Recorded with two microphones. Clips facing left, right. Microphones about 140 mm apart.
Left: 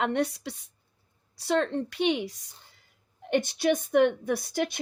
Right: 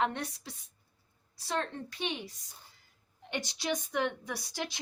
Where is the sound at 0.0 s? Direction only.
70° left (ahead or behind).